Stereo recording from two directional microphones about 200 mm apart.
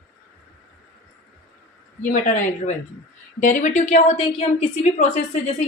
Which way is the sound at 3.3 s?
40° left (ahead or behind).